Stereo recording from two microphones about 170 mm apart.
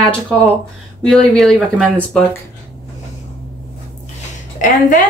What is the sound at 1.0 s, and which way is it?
A woman's voice, centre (ahead or behind).